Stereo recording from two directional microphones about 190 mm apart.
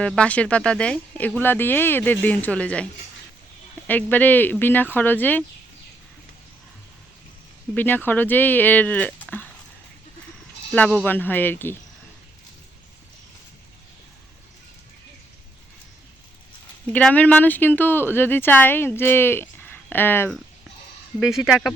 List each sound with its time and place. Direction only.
0.0 s speech: 5° left (ahead or behind)
3.8 s speech: 10° left (ahead or behind)
7.7 s speech: 10° left (ahead or behind)
10.7 s speech: 5° left (ahead or behind)
16.9 s speech: 5° left (ahead or behind)
21.2 s speech: centre (ahead or behind)